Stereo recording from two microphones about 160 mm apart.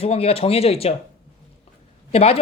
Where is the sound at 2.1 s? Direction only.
40° left (ahead or behind).